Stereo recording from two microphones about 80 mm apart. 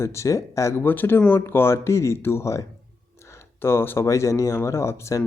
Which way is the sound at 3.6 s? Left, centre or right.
Left.